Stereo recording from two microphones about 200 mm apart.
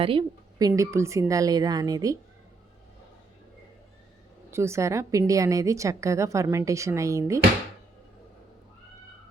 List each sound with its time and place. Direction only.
0.0 s a woman's voice: 25° right (ahead or behind)
0.7 s a woman's voice: 15° right (ahead or behind)
4.5 s a woman's voice: 15° right (ahead or behind)